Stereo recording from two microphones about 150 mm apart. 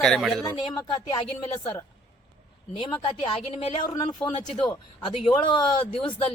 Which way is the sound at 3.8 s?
25° left (ahead or behind).